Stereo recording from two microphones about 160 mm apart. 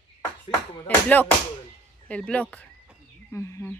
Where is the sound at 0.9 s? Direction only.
10° left (ahead or behind).